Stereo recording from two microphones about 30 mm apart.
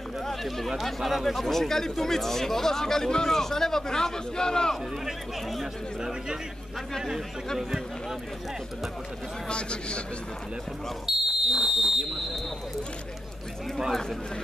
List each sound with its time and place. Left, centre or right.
0.2 s a sound: centre
0.8 s speech: centre; by 4.7 s left
5.0 s speech: centre
9.5 s a man's voice: left
11.1 s speech: centre